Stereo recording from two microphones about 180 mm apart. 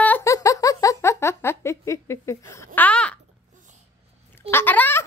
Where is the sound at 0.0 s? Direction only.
15° left (ahead or behind).